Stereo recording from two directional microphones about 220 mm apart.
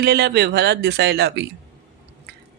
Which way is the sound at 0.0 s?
45° right (ahead or behind).